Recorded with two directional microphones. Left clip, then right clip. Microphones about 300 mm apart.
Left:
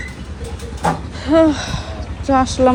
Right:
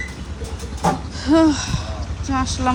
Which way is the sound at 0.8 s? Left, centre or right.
Centre.